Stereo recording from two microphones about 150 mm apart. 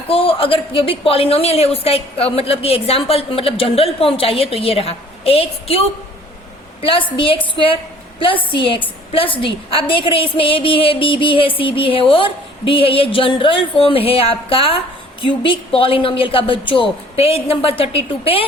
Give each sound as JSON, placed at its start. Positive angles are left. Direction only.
{"t": 0.1, "sound": "a woman's voice", "side_deg": 35}
{"t": 6.8, "sound": "a woman's voice", "side_deg": 35}